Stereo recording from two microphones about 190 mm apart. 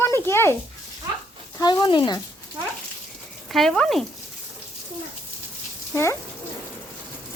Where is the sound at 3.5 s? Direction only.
Centre (ahead or behind).